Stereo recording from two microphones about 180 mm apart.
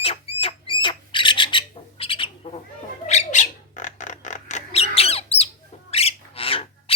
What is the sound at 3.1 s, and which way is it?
Bird, 40° left (ahead or behind).